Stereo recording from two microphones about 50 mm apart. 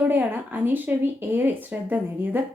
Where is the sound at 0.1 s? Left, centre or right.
Right.